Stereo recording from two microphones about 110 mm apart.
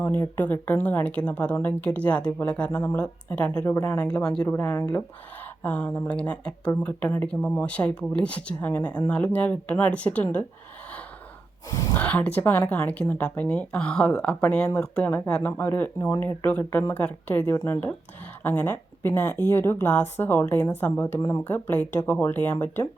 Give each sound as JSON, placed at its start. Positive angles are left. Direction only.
{"t": 0.0, "sound": "a woman's voice", "side_deg": 15}
{"t": 4.0, "sound": "speech", "side_deg": 10}
{"t": 4.4, "sound": "a woman's voice", "side_deg": 20}
{"t": 11.7, "sound": "speech", "side_deg": 30}
{"t": 11.9, "sound": "a woman's voice", "side_deg": 15}
{"t": 21.2, "sound": "speech", "side_deg": 30}
{"t": 21.4, "sound": "speech", "side_deg": 15}